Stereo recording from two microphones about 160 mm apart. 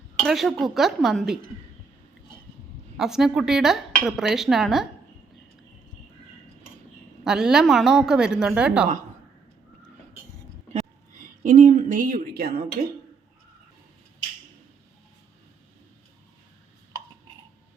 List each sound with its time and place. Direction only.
0.2 s dishes: centre (ahead or behind)
3.0 s dishes: 5° right (ahead or behind)
7.3 s dishes: 5° right (ahead or behind)
11.2 s speech: 50° right (ahead or behind); by 12.6 s 70° right (ahead or behind)